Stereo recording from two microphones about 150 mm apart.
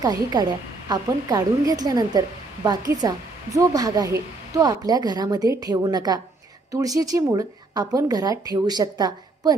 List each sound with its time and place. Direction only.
0.0 s speech: 25° right (ahead or behind)